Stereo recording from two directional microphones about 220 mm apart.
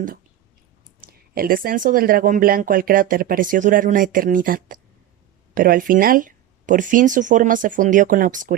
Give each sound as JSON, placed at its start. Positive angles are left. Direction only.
{"t": 1.0, "sound": "speech", "side_deg": -40}